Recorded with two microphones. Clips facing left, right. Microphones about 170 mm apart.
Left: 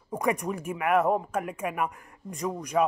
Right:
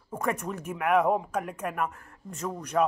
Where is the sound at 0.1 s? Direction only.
10° left (ahead or behind).